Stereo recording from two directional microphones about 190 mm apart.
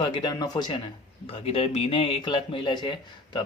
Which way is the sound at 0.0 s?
25° left (ahead or behind).